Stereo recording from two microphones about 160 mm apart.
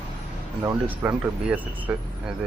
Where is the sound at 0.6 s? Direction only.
10° right (ahead or behind).